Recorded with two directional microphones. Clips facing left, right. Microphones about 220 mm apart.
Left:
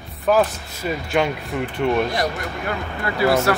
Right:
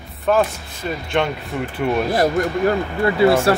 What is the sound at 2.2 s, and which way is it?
Speech, 40° right (ahead or behind).